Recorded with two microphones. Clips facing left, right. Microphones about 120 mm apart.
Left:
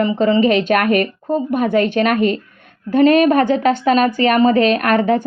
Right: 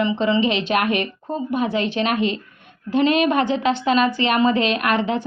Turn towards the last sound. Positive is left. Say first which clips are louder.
# left 6 dB
turn(degrees=45)  # may be behind; listen again after turning